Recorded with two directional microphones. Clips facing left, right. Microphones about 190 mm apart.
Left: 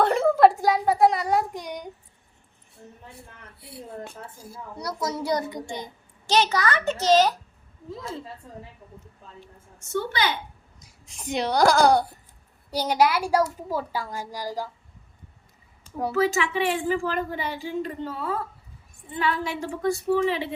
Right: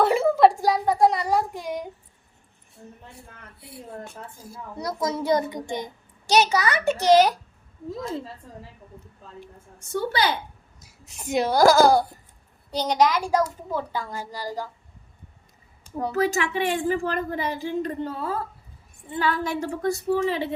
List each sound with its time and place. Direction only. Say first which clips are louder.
0.0 s a sound: even; 5° right (ahead or behind)
5.0 s a child's voice: right 4 dB; 20° right (ahead or behind)
9.7 s a woman's voice: right 2 dB; 35° right (ahead or behind)
10.8 s speech: right 2 dB; 5° right (ahead or behind)
12.7 s a woman's voice: right 1 dB; 10° left (ahead or behind)
16.1 s a woman's voice: even; 45° right (ahead or behind)